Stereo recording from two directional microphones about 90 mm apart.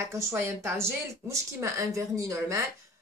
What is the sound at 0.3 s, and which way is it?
Speech, 25° right (ahead or behind).